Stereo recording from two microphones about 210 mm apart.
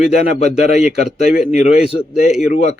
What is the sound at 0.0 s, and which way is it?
Speech, 30° left (ahead or behind).